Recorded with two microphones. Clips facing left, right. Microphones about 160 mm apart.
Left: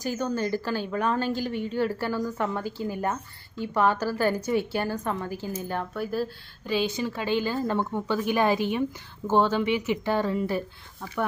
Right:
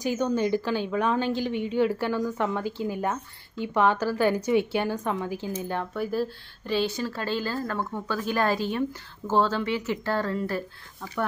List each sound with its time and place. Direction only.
0.0 s a woman's voice: 5° left (ahead or behind); by 10.6 s 20° left (ahead or behind)